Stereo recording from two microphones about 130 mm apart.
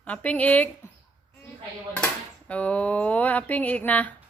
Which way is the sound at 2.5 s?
10° left (ahead or behind).